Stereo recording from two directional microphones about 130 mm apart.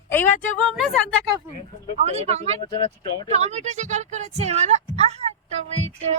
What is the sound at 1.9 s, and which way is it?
Speech, 55° right (ahead or behind).